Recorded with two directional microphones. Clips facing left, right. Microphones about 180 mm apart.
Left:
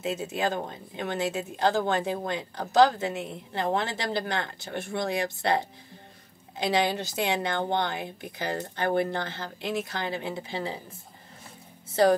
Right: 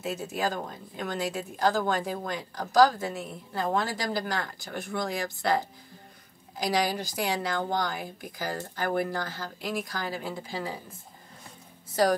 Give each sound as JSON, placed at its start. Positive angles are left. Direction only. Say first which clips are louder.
{"t": 0.0, "sound": "speech", "louder": "left 2 dB", "side_deg": 25}
{"t": 11.9, "sound": "speech", "louder": "left 3 dB", "side_deg": 25}